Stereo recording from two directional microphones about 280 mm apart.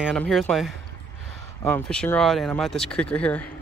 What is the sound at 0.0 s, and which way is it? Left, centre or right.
Speech, centre.